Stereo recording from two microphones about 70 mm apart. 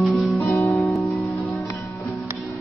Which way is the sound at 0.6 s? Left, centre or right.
Centre.